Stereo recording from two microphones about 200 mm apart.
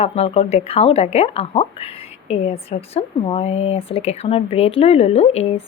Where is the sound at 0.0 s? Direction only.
30° left (ahead or behind).